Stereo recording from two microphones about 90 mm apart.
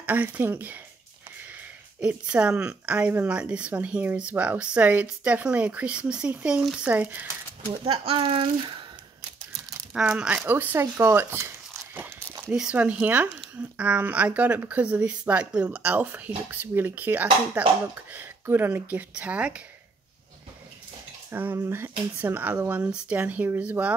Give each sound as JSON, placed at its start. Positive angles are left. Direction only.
{"t": 0.0, "sound": "speech", "side_deg": -20}
{"t": 2.0, "sound": "speech", "side_deg": -15}
{"t": 6.9, "sound": "speech", "side_deg": -20}
{"t": 8.2, "sound": "speech", "side_deg": -65}
{"t": 9.9, "sound": "speech", "side_deg": -10}
{"t": 12.7, "sound": "speech", "side_deg": -15}
{"t": 21.4, "sound": "speech", "side_deg": -25}